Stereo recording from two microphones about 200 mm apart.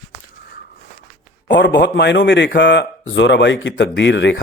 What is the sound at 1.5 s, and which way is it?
Speech, 60° left (ahead or behind).